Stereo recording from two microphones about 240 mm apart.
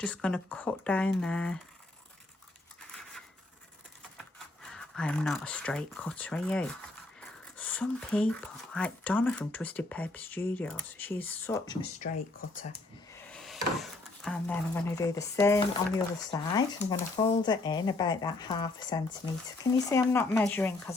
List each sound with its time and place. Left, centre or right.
0.0 s speech: centre
4.7 s speech: centre
12.0 s speech: left
13.3 s speech: centre